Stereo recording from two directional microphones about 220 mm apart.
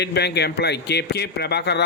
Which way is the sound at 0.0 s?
50° left (ahead or behind).